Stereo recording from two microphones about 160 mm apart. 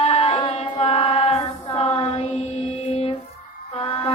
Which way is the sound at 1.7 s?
35° left (ahead or behind).